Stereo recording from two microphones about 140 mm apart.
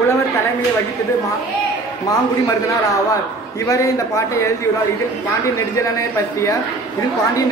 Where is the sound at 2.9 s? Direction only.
25° left (ahead or behind).